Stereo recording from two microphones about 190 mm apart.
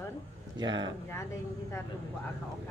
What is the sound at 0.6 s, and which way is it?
Speech, 20° right (ahead or behind).